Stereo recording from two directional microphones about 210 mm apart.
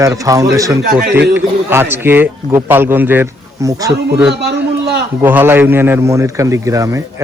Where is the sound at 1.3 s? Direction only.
10° right (ahead or behind).